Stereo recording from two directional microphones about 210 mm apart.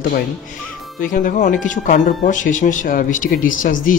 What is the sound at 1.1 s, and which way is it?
Speech, 40° left (ahead or behind).